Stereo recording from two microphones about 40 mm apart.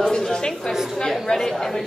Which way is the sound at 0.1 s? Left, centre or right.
Centre.